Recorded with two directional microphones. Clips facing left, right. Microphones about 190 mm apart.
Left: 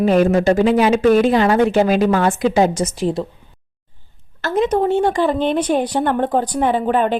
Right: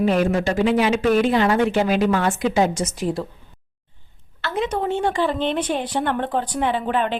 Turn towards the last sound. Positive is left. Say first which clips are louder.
# left 5 dB
turn(degrees=45)  # may be behind; listen again after turning